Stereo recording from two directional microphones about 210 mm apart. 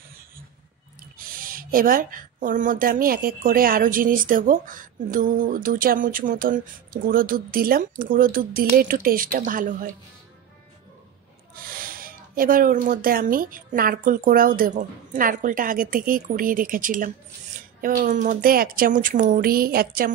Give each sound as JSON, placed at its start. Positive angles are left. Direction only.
{"t": 1.1, "sound": "a woman's voice", "side_deg": -40}
{"t": 11.5, "sound": "a woman's voice", "side_deg": -45}